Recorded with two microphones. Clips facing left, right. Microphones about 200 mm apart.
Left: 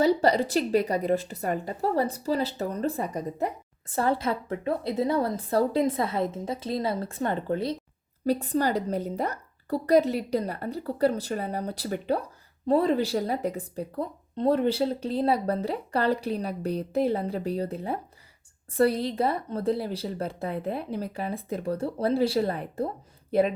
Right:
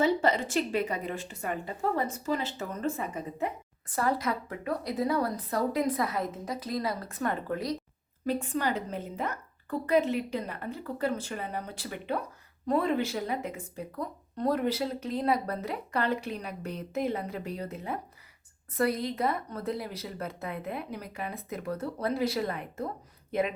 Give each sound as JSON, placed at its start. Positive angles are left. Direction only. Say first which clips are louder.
{"t": 0.0, "sound": "speech", "louder": "left 4 dB", "side_deg": 35}
{"t": 3.8, "sound": "a woman's voice", "louder": "left 3 dB", "side_deg": 25}